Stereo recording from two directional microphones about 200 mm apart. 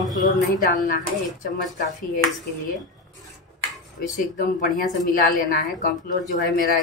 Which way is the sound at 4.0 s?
45° left (ahead or behind).